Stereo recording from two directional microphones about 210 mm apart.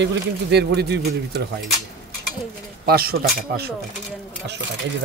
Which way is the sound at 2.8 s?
45° right (ahead or behind).